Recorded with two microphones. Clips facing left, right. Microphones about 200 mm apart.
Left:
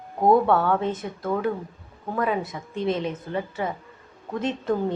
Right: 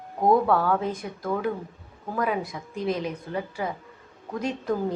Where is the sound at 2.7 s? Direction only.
30° left (ahead or behind).